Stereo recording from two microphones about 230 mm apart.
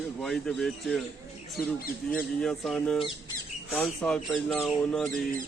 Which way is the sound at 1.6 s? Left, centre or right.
Left.